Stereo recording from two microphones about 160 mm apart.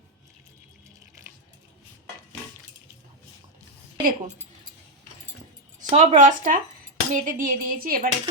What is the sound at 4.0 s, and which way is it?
Speech, 60° right (ahead or behind).